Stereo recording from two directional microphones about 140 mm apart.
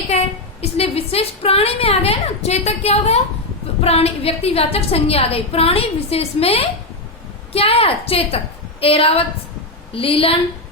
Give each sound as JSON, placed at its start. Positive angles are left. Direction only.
{"t": 0.1, "sound": "a woman's voice", "side_deg": 50}